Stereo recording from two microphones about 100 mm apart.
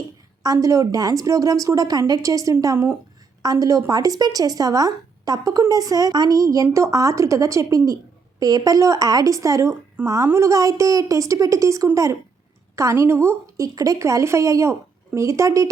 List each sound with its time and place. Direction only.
0.4 s speech: 35° right (ahead or behind)
2.7 s a woman's voice: 25° right (ahead or behind)
3.4 s speech: 40° right (ahead or behind)